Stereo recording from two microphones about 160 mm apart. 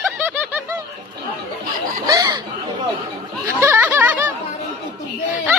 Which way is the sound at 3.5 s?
15° right (ahead or behind).